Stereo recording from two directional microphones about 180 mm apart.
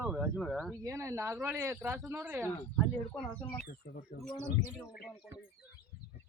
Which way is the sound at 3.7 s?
50° left (ahead or behind).